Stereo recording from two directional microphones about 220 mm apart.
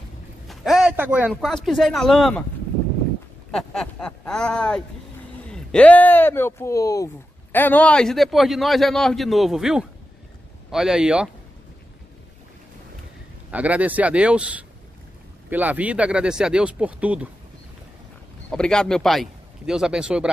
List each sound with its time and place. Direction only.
0.5 s a sound: centre (ahead or behind)
1.3 s a man's voice: centre (ahead or behind)
3.5 s a man's voice: 5° left (ahead or behind)
13.5 s a man's voice: 5° right (ahead or behind)
18.5 s a man's voice: 5° left (ahead or behind)